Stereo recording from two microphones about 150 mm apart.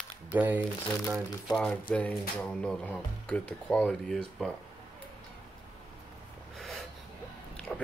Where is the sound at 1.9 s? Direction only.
5° left (ahead or behind).